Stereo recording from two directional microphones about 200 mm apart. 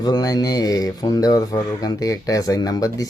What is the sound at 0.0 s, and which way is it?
Speech, 20° left (ahead or behind).